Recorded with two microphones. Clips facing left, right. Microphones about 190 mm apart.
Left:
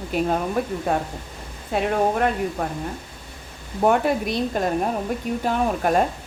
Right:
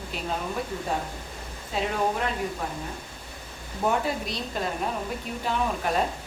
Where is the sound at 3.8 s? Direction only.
55° left (ahead or behind).